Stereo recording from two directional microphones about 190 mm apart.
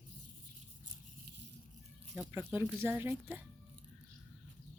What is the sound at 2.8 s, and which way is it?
Speech, 10° right (ahead or behind).